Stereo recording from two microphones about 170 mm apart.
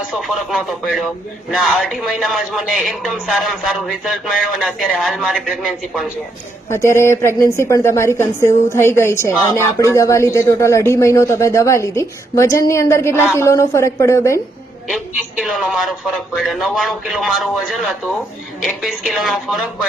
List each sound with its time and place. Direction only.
0.1 s speech: centre (ahead or behind)
6.7 s a man's voice: 15° left (ahead or behind)
14.8 s speech: centre (ahead or behind)